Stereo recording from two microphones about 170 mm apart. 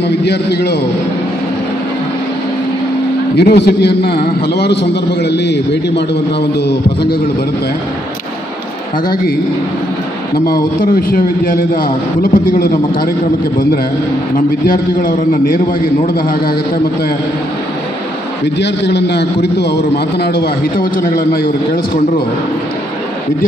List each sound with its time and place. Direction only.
0.0 s a man's voice: 80° left
3.3 s a man's voice: 75° left (ahead or behind)
5.2 s a man's voice: 90° left
10.3 s a man's voice: 60° left (ahead or behind)
14.3 s a man's voice: 55° left (ahead or behind)
18.6 s a man's voice: 85° left; by 21.5 s 60° left (ahead or behind)